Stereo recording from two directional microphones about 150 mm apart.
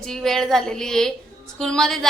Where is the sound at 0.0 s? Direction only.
5° left (ahead or behind).